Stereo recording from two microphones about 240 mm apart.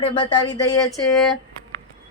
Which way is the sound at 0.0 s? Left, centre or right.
Centre.